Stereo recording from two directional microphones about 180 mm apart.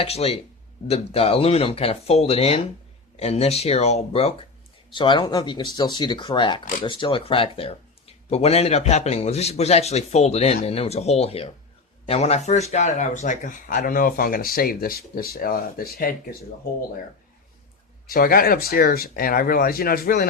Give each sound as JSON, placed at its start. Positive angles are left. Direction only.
{"t": 0.0, "sound": "speech", "side_deg": 35}
{"t": 18.1, "sound": "speech", "side_deg": 55}